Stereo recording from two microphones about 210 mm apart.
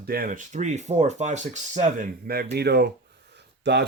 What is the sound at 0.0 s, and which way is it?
Speech, 45° right (ahead or behind).